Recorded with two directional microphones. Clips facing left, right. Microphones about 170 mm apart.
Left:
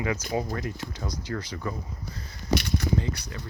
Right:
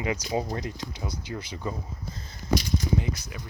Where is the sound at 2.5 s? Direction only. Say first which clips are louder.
Even; 65° left (ahead or behind).